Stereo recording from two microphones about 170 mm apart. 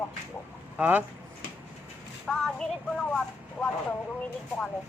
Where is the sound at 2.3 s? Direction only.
5° left (ahead or behind).